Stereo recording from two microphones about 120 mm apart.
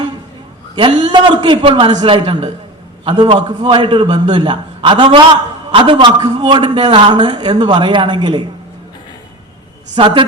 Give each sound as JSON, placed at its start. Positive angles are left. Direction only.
{"t": 0.8, "sound": "a man's voice", "side_deg": -40}
{"t": 9.9, "sound": "a woman's voice", "side_deg": -45}